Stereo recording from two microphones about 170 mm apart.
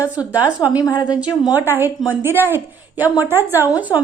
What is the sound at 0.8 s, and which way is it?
Speech, 25° left (ahead or behind).